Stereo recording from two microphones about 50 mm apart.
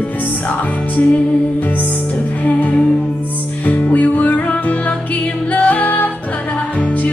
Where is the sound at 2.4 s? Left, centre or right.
Left.